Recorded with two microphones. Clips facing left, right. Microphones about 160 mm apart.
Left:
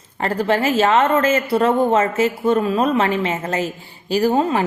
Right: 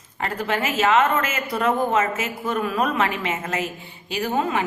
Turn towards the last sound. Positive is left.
turn(degrees=35)  # may be behind; listen again after turning